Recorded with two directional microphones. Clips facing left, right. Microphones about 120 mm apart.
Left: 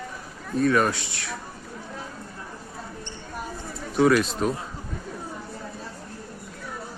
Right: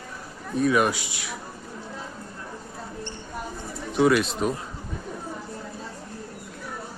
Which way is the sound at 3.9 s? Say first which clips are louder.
Left 1 dB; centre (ahead or behind).